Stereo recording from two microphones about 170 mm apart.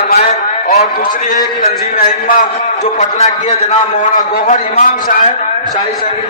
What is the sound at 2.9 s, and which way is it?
A man's voice, 45° left (ahead or behind).